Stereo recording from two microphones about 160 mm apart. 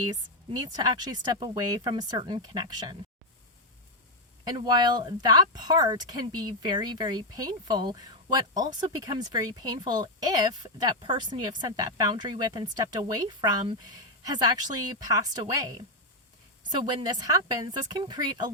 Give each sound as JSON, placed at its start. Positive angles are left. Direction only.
{"t": 0.0, "sound": "speech", "side_deg": -25}
{"t": 4.4, "sound": "speech", "side_deg": -25}
{"t": 16.7, "sound": "speech", "side_deg": -25}